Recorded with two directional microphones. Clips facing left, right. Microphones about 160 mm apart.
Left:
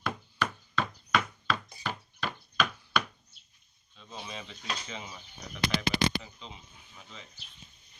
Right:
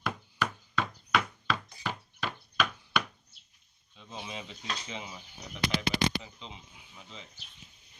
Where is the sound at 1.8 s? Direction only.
Centre (ahead or behind).